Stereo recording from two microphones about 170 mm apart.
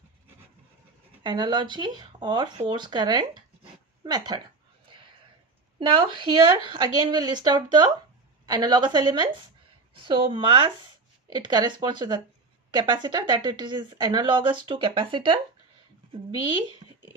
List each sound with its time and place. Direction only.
1.2 s speech: 30° right (ahead or behind)
5.8 s speech: 30° right (ahead or behind)